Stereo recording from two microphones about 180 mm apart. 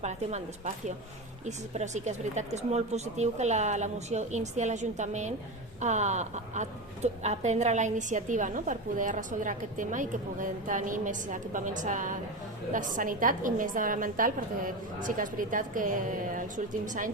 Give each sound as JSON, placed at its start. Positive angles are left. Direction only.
{"t": 0.0, "sound": "a woman's voice", "side_deg": -40}